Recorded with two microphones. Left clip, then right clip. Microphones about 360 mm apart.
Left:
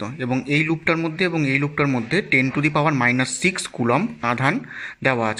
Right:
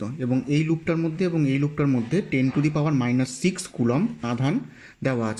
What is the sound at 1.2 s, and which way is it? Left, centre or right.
Speech, centre.